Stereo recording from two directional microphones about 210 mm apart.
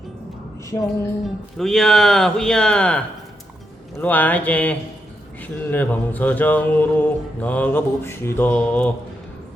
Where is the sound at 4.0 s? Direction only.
10° left (ahead or behind).